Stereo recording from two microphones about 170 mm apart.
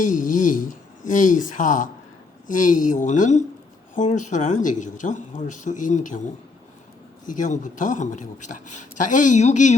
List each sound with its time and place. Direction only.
0.0 s speech: 50° left (ahead or behind)
7.3 s speech: 50° left (ahead or behind)